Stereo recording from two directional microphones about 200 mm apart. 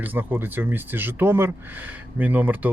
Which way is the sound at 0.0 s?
10° right (ahead or behind).